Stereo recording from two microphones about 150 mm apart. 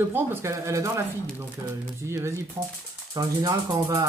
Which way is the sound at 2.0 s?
20° right (ahead or behind).